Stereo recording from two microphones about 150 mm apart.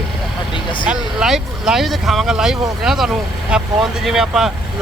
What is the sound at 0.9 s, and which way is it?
Speech, 5° right (ahead or behind).